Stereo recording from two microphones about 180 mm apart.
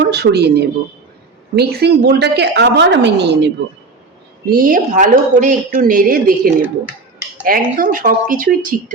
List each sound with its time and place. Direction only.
0.0 s a woman's voice: 65° right (ahead or behind)
4.4 s speech: 50° right (ahead or behind)